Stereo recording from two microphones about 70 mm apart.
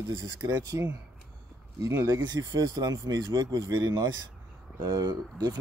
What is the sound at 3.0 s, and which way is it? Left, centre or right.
Speech, right.